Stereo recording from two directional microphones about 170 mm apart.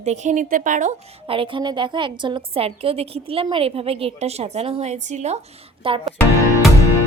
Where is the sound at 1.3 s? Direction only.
30° right (ahead or behind).